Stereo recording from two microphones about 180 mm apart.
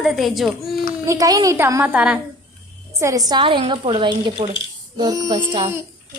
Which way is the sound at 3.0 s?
20° right (ahead or behind).